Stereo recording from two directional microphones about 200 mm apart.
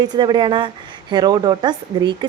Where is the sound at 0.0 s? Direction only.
20° right (ahead or behind).